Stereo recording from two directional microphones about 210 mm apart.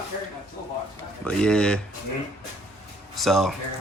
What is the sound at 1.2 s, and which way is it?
Speech, 5° left (ahead or behind).